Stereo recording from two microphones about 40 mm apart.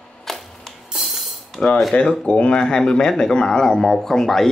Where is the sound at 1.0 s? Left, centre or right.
Centre.